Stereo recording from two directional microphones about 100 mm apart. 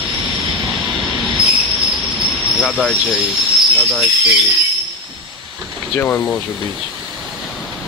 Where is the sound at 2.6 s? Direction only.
5° left (ahead or behind).